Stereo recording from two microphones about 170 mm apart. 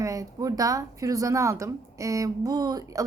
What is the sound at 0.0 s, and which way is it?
Speech, 20° right (ahead or behind).